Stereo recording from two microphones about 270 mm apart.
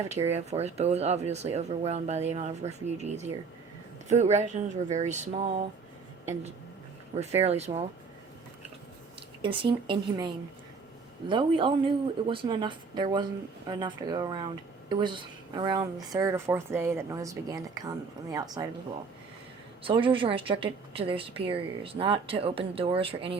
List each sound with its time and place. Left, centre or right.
0.3 s a woman's voice: right
7.2 s a woman's voice: right
9.4 s a woman's voice: centre
11.3 s a woman's voice: centre
19.8 s a woman's voice: centre